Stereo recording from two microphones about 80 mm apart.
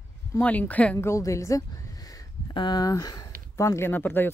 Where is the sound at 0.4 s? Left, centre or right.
Centre.